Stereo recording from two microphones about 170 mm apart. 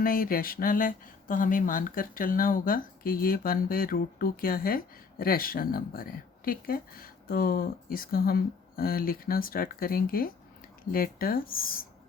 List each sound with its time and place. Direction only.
0.0 s speech: 55° left (ahead or behind)